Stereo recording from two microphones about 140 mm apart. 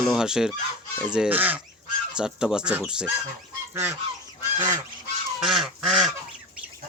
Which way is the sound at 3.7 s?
15° right (ahead or behind).